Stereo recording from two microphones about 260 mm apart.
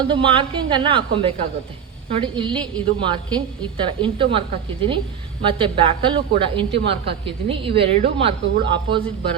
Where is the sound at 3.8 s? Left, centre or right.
Centre.